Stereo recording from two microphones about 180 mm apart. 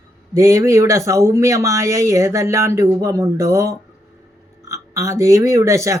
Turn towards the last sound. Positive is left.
turn(degrees=-15)  # may be behind; listen again after turning